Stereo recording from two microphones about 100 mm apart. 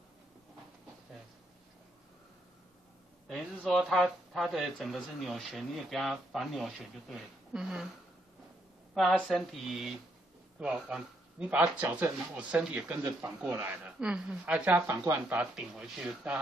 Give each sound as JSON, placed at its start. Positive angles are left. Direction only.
{"t": 3.6, "sound": "speech", "side_deg": 0}
{"t": 9.3, "sound": "speech", "side_deg": 0}
{"t": 14.9, "sound": "speech", "side_deg": -25}
{"t": 15.2, "sound": "speech", "side_deg": -10}